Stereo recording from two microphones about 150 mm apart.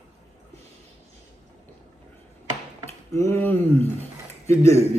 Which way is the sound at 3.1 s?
15° left (ahead or behind).